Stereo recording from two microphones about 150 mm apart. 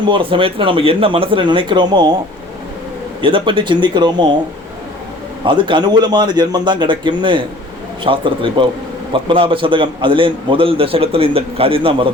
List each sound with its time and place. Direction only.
0.0 s a man's voice: 35° right (ahead or behind)
3.2 s a man's voice: 35° right (ahead or behind)
5.5 s a man's voice: 35° right (ahead or behind)